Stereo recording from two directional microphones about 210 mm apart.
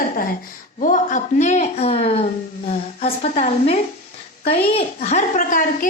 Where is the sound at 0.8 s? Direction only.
35° left (ahead or behind).